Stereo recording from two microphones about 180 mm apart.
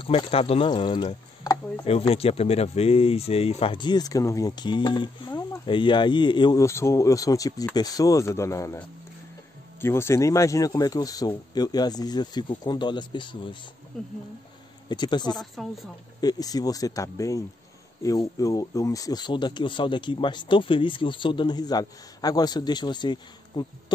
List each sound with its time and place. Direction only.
0.0 s speech: 30° left (ahead or behind)
1.9 s speech: 35° left (ahead or behind)
13.9 s speech: centre (ahead or behind)
14.9 s speech: 25° left (ahead or behind)
15.3 s speech: centre (ahead or behind)
16.2 s speech: 20° left (ahead or behind)